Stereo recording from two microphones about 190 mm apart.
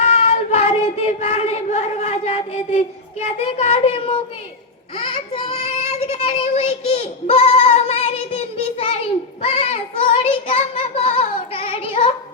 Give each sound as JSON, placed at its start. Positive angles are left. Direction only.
{"t": 0.0, "sound": "child singing", "side_deg": 35}
{"t": 9.4, "sound": "a sound", "side_deg": 30}
{"t": 10.5, "sound": "child singing", "side_deg": 30}